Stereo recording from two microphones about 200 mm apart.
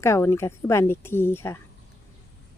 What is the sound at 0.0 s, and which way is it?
A woman's voice, 15° left (ahead or behind).